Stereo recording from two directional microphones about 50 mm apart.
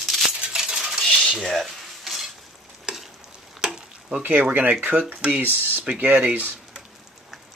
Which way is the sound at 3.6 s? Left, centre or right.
Centre.